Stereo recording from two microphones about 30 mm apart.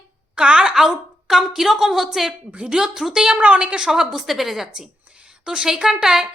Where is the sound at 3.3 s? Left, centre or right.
Right.